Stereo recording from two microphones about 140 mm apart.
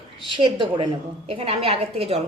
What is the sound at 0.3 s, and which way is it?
A woman's voice, 35° right (ahead or behind).